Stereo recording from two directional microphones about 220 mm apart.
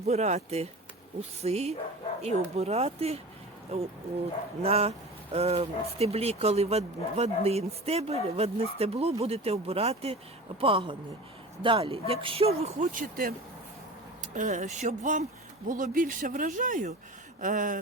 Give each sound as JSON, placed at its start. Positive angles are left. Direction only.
{"t": 0.0, "sound": "speech", "side_deg": -30}
{"t": 14.3, "sound": "speech", "side_deg": -35}